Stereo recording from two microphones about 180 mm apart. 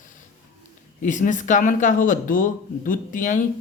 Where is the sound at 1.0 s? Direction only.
45° left (ahead or behind).